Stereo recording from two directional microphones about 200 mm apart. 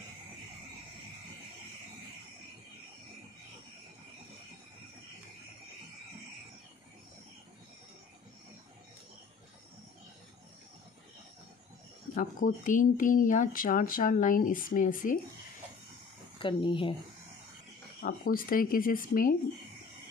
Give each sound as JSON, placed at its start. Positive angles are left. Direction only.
{"t": 12.2, "sound": "speech", "side_deg": 40}
{"t": 16.3, "sound": "speech", "side_deg": 25}
{"t": 18.0, "sound": "speech", "side_deg": 45}